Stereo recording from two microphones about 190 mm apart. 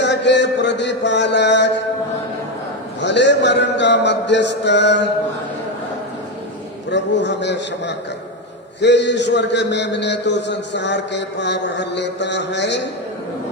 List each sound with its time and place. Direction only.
0.0 s mantra: 65° left (ahead or behind)
3.0 s a man's voice: 65° left (ahead or behind)
6.9 s a man's voice: 65° left (ahead or behind)